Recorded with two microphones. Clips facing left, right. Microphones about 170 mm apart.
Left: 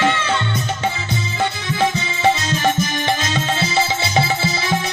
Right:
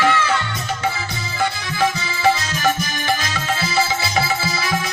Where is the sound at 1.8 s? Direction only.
25° left (ahead or behind).